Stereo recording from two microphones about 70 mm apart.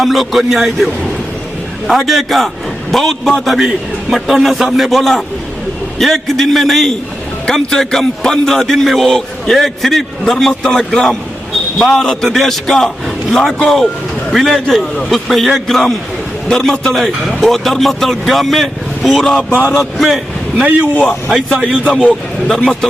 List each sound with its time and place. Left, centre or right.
0.0 s a man's voice: centre
1.9 s a man's voice: centre
19.5 s a sound: right
19.7 s a man's voice: centre